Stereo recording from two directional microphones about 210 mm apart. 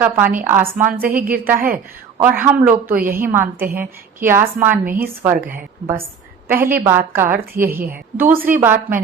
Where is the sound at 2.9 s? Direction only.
45° right (ahead or behind).